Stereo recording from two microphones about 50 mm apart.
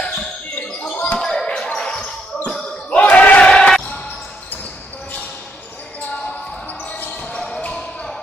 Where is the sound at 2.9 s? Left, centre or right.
Left.